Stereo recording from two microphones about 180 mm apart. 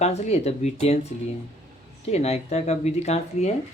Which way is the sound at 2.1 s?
35° left (ahead or behind).